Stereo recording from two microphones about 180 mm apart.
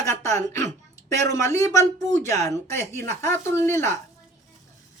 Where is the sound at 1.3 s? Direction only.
15° left (ahead or behind).